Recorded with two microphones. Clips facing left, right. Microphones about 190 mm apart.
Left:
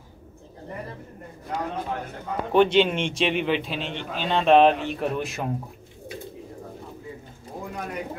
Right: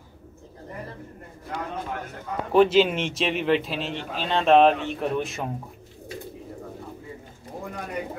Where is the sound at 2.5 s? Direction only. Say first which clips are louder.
Right 1 dB; 5° right (ahead or behind).